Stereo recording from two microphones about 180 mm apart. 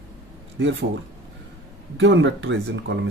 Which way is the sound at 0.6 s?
90° right.